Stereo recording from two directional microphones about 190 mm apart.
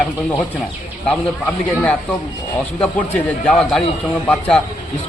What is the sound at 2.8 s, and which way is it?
A woman's voice, 5° left (ahead or behind).